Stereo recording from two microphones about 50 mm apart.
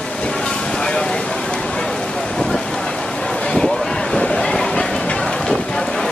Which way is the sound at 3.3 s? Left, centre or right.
Centre.